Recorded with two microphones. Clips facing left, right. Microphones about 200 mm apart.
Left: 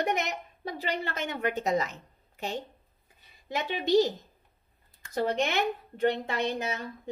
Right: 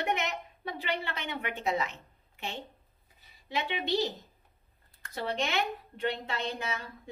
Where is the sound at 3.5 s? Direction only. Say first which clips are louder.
Left 7 dB; 45° left (ahead or behind).